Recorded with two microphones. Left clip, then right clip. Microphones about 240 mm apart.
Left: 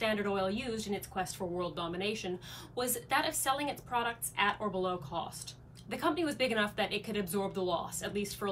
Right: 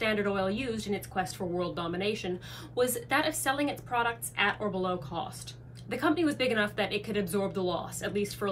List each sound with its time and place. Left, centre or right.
0.0 s speech: centre